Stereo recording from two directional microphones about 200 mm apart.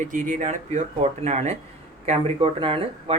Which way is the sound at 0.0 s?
40° right (ahead or behind).